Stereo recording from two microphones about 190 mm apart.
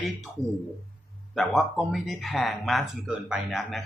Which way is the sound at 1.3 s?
Centre (ahead or behind).